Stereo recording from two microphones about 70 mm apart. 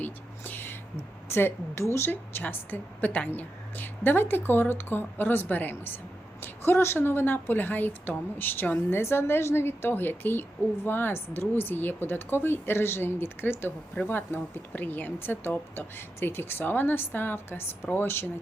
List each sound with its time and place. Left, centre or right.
0.0 s whispering: left
1.3 s a woman's voice: left